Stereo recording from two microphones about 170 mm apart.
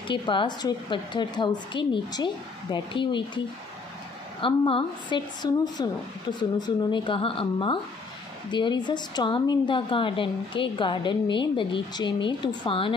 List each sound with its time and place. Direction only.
0.1 s a woman's voice: 30° left (ahead or behind)